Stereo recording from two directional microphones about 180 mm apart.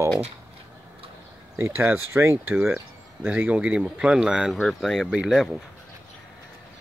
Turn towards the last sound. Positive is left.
turn(degrees=-5)  # may be behind; listen again after turning